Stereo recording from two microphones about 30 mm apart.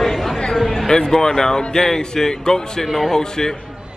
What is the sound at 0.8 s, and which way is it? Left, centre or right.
A man's voice, left.